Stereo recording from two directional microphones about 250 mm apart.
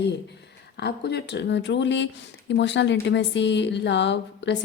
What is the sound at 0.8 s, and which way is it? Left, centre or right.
Speech, left.